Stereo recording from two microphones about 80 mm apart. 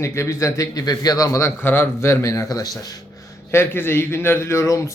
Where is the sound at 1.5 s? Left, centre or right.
Left.